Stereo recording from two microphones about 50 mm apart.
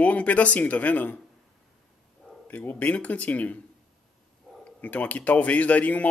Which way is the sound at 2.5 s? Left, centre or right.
Left.